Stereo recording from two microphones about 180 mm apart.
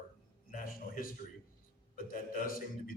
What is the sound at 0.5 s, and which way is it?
A man's voice, 50° left (ahead or behind).